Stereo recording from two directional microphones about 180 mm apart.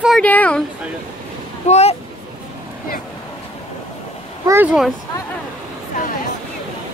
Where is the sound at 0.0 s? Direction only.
5° left (ahead or behind).